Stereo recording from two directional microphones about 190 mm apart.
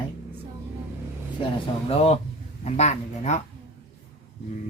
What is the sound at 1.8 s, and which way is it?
Speech, 30° left (ahead or behind).